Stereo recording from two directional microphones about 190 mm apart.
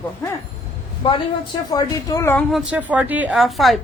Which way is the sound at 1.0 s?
25° left (ahead or behind).